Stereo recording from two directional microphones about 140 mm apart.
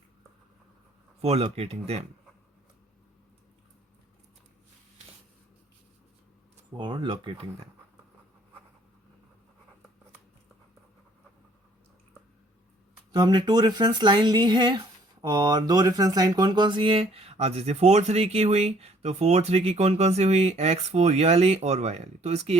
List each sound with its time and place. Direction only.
1.2 s speech: 45° right (ahead or behind)
6.7 s speech: 35° right (ahead or behind)
13.1 s speech: 30° right (ahead or behind); by 22.5 s 50° right (ahead or behind)